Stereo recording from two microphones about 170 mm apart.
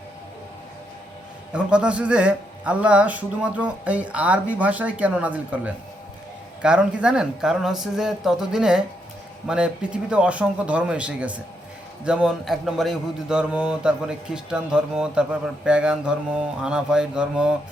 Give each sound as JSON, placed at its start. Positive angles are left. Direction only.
{"t": 1.5, "sound": "a man's voice", "side_deg": -5}